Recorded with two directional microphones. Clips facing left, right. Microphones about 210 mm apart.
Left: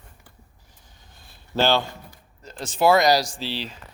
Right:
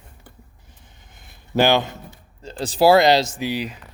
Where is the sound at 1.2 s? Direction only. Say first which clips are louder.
Right 4 dB; 15° right (ahead or behind).